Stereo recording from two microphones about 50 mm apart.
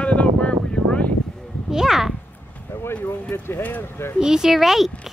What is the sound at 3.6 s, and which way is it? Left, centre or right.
Speech, left.